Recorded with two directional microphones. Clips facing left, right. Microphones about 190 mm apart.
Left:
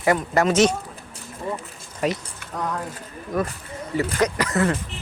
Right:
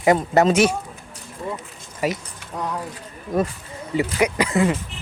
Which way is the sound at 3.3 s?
25° right (ahead or behind).